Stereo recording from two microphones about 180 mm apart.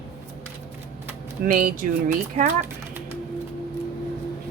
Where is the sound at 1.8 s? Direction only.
45° right (ahead or behind).